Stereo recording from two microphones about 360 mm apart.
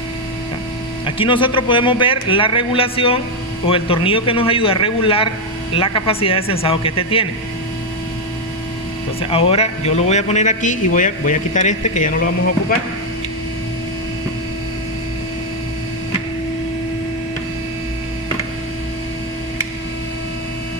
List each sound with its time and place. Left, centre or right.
1.0 s a man's voice: centre
9.2 s a man's voice: centre